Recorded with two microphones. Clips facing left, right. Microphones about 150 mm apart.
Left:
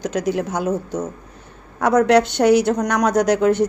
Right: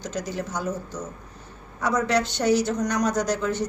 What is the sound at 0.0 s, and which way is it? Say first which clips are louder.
Speech: left 9 dB; 65° left (ahead or behind).